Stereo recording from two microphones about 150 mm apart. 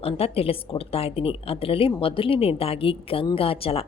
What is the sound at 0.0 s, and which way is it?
A woman's voice, 40° left (ahead or behind).